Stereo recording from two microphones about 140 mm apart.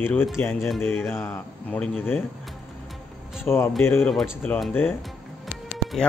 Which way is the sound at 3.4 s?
15° left (ahead or behind).